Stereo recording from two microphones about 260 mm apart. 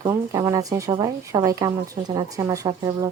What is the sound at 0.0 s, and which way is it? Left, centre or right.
Speech, centre.